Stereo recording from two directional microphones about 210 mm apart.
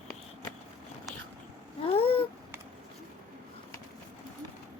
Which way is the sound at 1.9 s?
25° left (ahead or behind).